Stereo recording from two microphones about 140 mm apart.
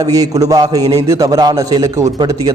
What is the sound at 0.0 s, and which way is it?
A man's voice, 25° right (ahead or behind).